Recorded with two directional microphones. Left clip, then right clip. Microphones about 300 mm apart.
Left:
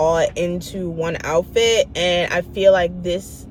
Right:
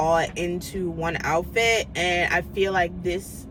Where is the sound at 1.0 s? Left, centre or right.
Centre.